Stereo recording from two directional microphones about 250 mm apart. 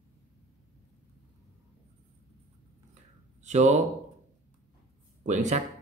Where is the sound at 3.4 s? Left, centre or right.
Right.